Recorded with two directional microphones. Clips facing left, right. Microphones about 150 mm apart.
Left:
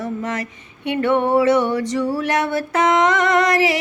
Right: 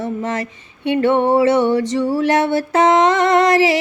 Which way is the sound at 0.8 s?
30° right (ahead or behind).